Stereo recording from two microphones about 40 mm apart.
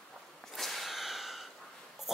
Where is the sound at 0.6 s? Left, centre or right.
Centre.